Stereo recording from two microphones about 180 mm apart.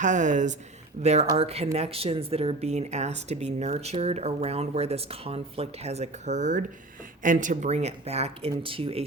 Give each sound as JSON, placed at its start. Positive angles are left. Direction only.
{"t": 0.0, "sound": "speech", "side_deg": -45}